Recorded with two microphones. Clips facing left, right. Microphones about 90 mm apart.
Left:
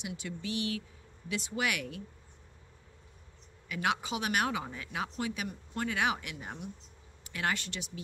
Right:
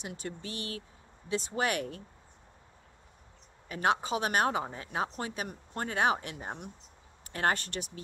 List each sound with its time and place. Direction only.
0.0 s speech: 40° right (ahead or behind)
3.6 s speech: 35° right (ahead or behind)